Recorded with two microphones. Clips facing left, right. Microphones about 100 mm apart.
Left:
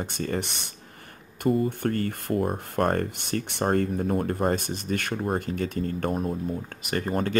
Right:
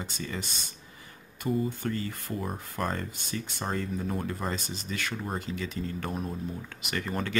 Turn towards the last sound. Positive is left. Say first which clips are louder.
# left 6 dB
turn(degrees=45)  # may be behind; listen again after turning